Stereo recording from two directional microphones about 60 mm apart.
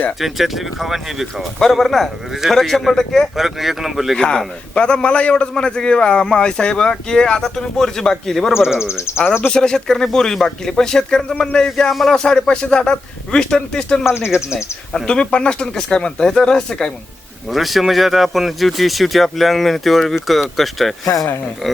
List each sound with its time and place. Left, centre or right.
0.2 s speech: centre
3.3 s speech: centre
4.2 s a man's voice: centre
8.8 s speech: left
9.5 s a man's voice: centre
14.1 s speech: left
14.9 s a man's voice: centre
17.5 s speech: centre